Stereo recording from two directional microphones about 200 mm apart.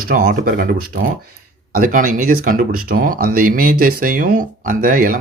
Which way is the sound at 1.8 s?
40° right (ahead or behind).